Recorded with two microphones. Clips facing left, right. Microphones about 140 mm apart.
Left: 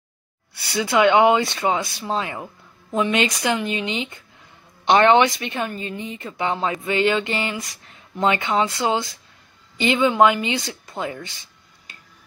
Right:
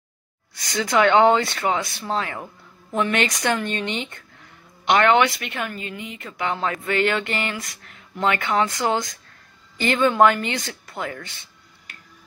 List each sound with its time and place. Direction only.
0.6 s speech: 10° left (ahead or behind)
4.8 s speech: 25° left (ahead or behind)